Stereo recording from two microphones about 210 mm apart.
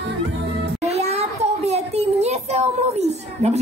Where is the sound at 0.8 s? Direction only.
30° right (ahead or behind).